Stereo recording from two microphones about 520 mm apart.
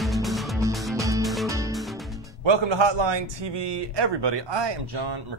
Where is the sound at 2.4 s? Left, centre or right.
Right.